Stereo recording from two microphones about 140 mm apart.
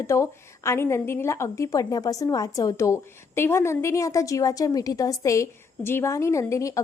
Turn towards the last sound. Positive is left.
turn(degrees=20)  # may be behind; listen again after turning